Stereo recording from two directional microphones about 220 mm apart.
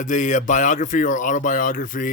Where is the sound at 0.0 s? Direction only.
35° left (ahead or behind).